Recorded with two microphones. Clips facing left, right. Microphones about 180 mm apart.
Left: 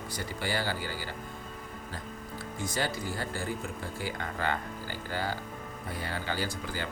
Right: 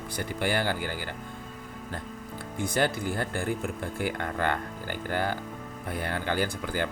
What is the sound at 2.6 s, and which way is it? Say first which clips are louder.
Speech: right 6 dB; 55° right (ahead or behind).